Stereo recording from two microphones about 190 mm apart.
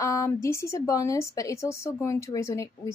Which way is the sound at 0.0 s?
15° left (ahead or behind).